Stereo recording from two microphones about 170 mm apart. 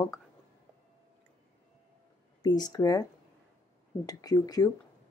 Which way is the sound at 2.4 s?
20° left (ahead or behind).